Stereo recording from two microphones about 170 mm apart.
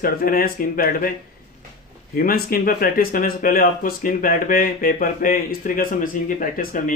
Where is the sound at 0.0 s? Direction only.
60° left (ahead or behind).